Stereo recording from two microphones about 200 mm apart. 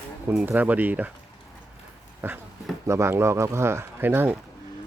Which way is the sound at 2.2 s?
10° right (ahead or behind).